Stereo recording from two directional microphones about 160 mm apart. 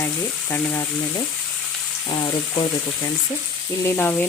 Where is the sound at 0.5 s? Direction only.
10° left (ahead or behind).